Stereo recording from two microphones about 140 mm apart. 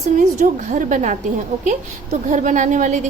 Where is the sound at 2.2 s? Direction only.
65° right (ahead or behind).